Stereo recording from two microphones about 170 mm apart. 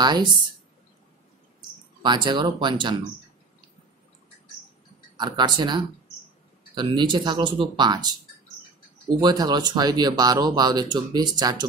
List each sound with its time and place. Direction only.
0.0 s speech: 25° right (ahead or behind)
2.0 s speech: 25° right (ahead or behind)
5.1 s speech: 25° right (ahead or behind)